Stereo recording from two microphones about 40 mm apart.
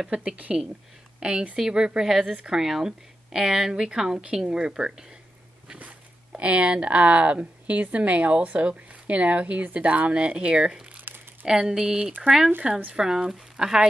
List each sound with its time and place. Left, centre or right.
0.0 s speech: right
1.2 s speech: right
1.7 s speech: centre
5.8 s speech: right